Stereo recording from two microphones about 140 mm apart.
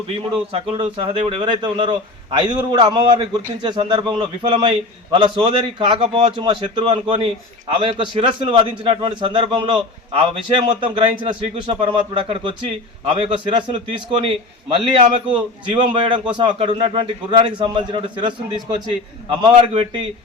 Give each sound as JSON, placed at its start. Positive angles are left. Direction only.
{"t": 0.2, "sound": "a man's voice", "side_deg": -40}